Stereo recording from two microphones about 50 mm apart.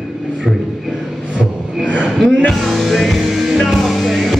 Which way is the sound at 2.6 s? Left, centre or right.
Centre.